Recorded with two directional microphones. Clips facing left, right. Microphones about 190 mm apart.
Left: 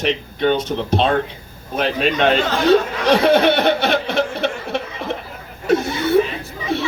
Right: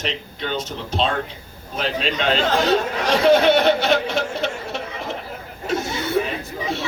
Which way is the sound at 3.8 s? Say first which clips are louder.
Left 2 dB; 60° left (ahead or behind).